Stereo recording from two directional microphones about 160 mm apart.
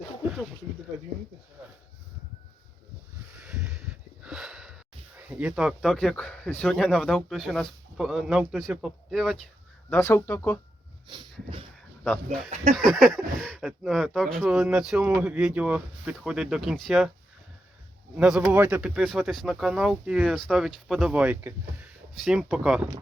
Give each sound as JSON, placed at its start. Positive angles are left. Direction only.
{"t": 3.3, "sound": "a sound", "side_deg": -5}
{"t": 5.3, "sound": "speech", "side_deg": -5}
{"t": 9.9, "sound": "speech", "side_deg": 15}
{"t": 11.1, "sound": "dog", "side_deg": -30}
{"t": 12.0, "sound": "speech", "side_deg": 5}
{"t": 18.2, "sound": "speech", "side_deg": -5}